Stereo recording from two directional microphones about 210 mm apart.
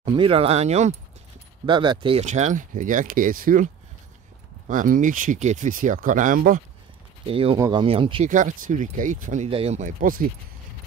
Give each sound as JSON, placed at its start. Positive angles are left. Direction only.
{"t": 0.0, "sound": "speech", "side_deg": -25}
{"t": 7.2, "sound": "speech", "side_deg": -25}
{"t": 8.3, "sound": "speech", "side_deg": -40}